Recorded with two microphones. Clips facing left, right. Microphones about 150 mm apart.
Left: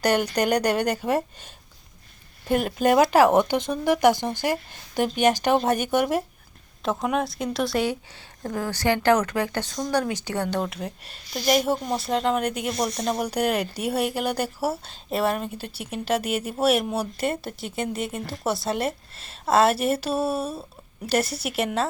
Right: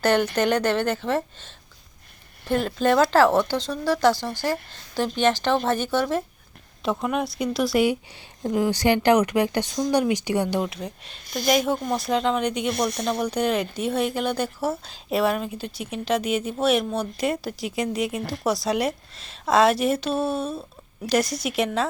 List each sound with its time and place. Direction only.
0.0 s speech: 10° left (ahead or behind)
6.8 s a woman's voice: centre (ahead or behind)
10.7 s speech: 5° left (ahead or behind)
11.2 s speech: 50° right (ahead or behind)
11.4 s speech: centre (ahead or behind)
12.7 s speech: 60° right (ahead or behind)
13.1 s speech: 10° left (ahead or behind)